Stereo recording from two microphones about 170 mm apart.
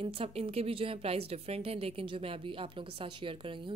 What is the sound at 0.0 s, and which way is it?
A woman's voice, 35° right (ahead or behind).